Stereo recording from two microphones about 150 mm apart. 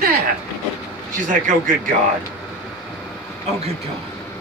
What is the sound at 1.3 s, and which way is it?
Speech, 60° right (ahead or behind).